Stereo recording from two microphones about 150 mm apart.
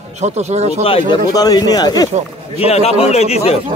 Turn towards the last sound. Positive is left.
turn(degrees=45)  # may be behind; listen again after turning